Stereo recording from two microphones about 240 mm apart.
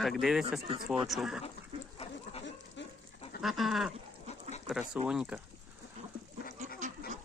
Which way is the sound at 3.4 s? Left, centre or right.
Centre.